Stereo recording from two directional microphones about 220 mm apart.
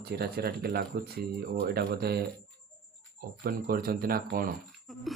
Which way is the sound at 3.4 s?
40° right (ahead or behind).